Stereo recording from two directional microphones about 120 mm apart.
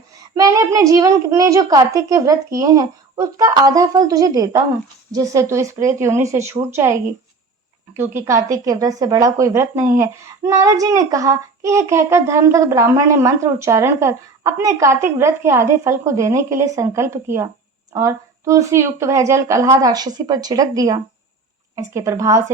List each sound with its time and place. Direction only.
0.3 s speech: 25° right (ahead or behind)